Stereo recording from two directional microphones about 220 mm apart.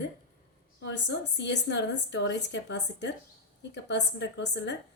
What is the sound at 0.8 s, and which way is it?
A woman's voice, 50° left (ahead or behind).